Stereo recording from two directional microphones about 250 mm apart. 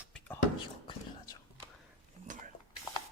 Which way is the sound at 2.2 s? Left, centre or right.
Right.